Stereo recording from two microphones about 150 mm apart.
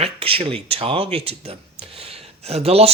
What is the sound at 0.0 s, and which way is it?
Speech, 40° right (ahead or behind).